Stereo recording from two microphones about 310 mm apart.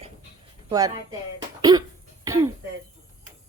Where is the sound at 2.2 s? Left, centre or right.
Centre.